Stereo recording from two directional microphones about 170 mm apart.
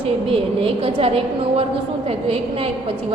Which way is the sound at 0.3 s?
35° right (ahead or behind).